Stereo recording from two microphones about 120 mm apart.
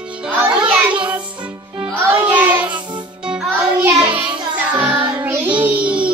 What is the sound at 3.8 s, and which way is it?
Child singing, 10° right (ahead or behind).